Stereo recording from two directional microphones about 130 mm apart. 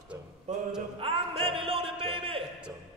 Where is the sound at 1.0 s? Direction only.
45° right (ahead or behind).